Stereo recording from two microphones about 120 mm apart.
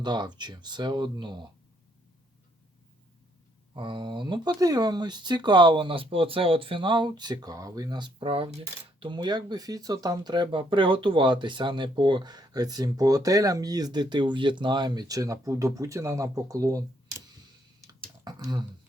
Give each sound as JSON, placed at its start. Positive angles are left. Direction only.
{"t": 0.0, "sound": "speech", "side_deg": -35}
{"t": 3.8, "sound": "speech", "side_deg": -40}
{"t": 9.0, "sound": "speech", "side_deg": -35}
{"t": 18.3, "sound": "speech", "side_deg": -35}